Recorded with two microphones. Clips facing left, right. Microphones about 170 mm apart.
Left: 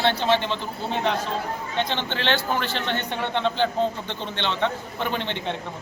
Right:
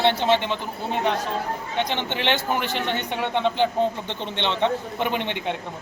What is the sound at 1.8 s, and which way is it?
A man's voice, 15° right (ahead or behind).